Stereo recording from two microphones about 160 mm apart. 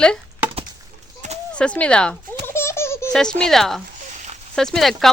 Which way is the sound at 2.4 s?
15° left (ahead or behind).